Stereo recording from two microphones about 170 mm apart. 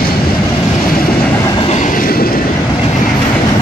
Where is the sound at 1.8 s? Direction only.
55° left (ahead or behind).